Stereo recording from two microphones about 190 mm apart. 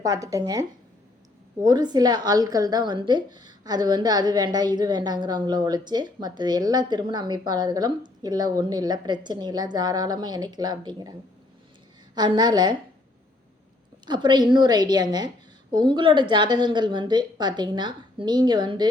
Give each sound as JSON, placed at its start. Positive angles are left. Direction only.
{"t": 0.0, "sound": "speech", "side_deg": -20}
{"t": 1.6, "sound": "a woman's voice", "side_deg": -20}
{"t": 12.1, "sound": "a woman's voice", "side_deg": -20}
{"t": 14.1, "sound": "a woman's voice", "side_deg": -25}